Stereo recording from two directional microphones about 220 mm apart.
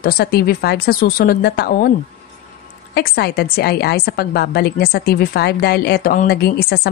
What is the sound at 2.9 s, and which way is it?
A woman's voice, 45° left (ahead or behind).